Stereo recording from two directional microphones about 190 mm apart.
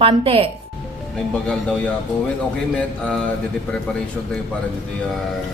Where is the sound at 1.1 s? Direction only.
5° left (ahead or behind).